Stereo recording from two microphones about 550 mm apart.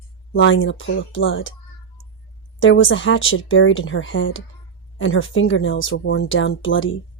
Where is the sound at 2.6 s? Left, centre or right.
Left.